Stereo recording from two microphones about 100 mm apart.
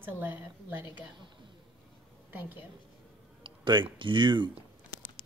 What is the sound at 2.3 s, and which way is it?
Speech, 20° right (ahead or behind).